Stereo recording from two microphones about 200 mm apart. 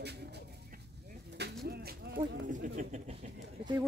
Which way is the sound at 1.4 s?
55° right (ahead or behind).